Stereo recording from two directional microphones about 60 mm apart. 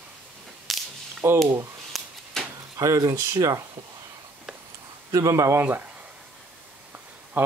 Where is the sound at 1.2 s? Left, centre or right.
Right.